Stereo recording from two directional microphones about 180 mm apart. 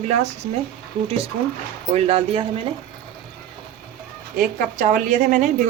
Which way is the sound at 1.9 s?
35° right (ahead or behind).